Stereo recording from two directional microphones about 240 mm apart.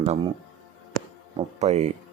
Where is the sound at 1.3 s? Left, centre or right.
Right.